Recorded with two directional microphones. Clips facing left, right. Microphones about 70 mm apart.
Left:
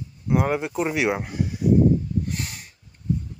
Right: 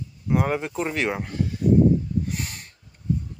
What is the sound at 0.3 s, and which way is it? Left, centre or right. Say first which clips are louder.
Speech: left 1 dB; centre.